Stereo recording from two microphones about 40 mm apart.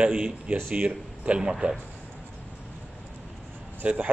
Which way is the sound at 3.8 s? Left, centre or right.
Right.